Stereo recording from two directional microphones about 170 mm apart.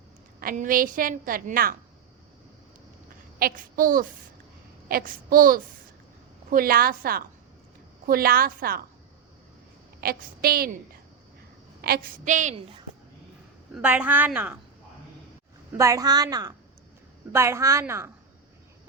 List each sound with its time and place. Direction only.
0.3 s a woman's voice: 55° right (ahead or behind)
3.3 s a woman's voice: 60° right (ahead or behind)
10.0 s a woman's voice: 65° right (ahead or behind)
11.8 s a woman's voice: 65° right (ahead or behind)
12.3 s speech: 45° right (ahead or behind)
13.7 s a woman's voice: 10° right (ahead or behind)
15.8 s a woman's voice: 20° right (ahead or behind)